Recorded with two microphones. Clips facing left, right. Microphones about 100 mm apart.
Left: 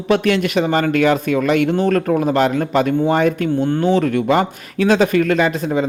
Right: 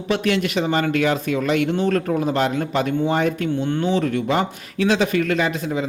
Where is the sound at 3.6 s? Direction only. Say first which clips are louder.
Left 5 dB; 40° left (ahead or behind).